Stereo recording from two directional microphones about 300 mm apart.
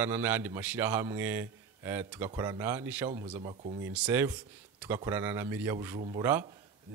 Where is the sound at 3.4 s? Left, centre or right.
Right.